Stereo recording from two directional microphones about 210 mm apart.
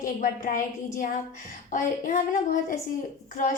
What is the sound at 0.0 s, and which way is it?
A woman's voice, 40° left (ahead or behind).